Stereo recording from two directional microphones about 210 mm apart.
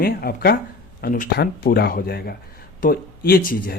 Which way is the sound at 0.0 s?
45° left (ahead or behind).